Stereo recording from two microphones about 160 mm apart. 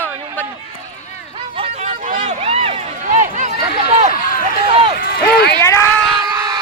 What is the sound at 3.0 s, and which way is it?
Run, 50° right (ahead or behind).